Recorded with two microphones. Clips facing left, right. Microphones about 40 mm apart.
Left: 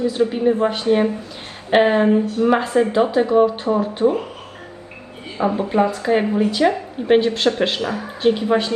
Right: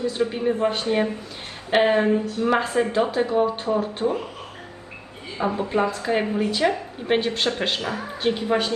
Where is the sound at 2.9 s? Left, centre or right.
Left.